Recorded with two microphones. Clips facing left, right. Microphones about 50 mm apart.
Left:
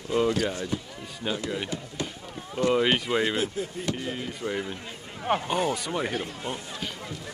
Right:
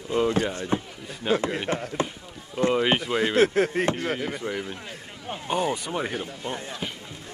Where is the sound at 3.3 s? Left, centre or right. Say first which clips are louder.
Right 9 dB; right.